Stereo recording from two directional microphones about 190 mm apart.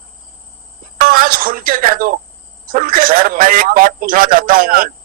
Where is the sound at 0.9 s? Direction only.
45° right (ahead or behind).